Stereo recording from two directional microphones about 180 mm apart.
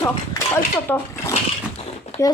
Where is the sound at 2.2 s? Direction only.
15° left (ahead or behind).